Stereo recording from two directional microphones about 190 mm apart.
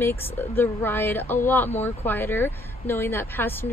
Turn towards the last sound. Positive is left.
turn(degrees=10)  # may be behind; listen again after turning